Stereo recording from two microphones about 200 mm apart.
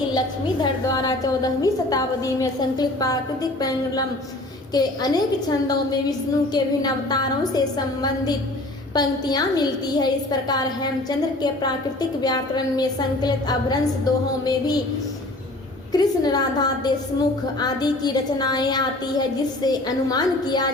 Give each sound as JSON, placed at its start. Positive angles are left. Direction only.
{"t": 0.6, "sound": "a woman's voice", "side_deg": 20}
{"t": 12.2, "sound": "a woman's voice", "side_deg": 20}
{"t": 15.9, "sound": "a woman's voice", "side_deg": 20}